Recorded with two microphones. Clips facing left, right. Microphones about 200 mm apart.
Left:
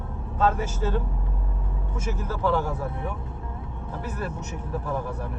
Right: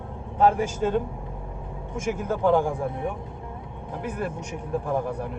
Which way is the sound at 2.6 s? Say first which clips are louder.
Right 3 dB; 25° right (ahead or behind).